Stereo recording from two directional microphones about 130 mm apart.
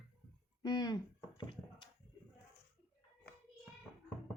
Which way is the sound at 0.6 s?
35° left (ahead or behind).